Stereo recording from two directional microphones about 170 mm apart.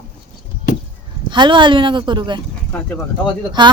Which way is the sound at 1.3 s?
25° right (ahead or behind).